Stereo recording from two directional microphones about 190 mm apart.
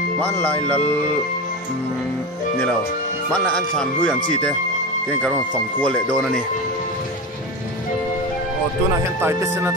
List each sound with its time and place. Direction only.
0.2 s speech: 10° left (ahead or behind)
3.3 s speech: 5° left (ahead or behind)
5.8 s speech: 5° left (ahead or behind)
9.2 s speech: 15° right (ahead or behind)